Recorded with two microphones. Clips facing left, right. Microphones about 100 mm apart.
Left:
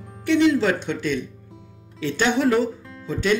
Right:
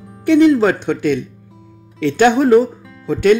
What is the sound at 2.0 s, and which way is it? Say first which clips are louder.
Speech: right 8 dB; 60° right (ahead or behind).